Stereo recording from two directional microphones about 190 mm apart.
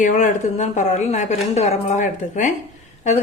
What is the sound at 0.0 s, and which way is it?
A woman's voice, 40° left (ahead or behind).